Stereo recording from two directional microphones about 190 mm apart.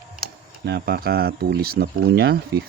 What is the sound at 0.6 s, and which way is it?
Speech, 55° right (ahead or behind).